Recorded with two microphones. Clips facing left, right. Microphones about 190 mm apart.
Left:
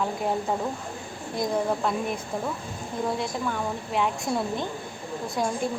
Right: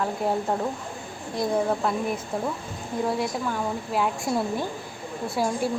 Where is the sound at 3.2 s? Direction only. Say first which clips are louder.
Right 2 dB; 5° right (ahead or behind).